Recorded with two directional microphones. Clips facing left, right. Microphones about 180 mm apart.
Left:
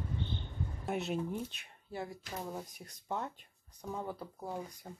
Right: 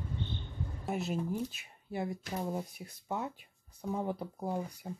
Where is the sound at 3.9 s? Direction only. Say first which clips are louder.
Right 5 dB; 20° right (ahead or behind).